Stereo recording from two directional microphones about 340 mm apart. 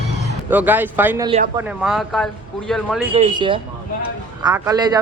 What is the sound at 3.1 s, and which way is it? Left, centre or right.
Speech, centre.